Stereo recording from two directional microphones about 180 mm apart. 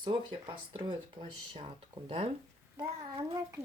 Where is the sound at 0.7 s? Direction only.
25° right (ahead or behind).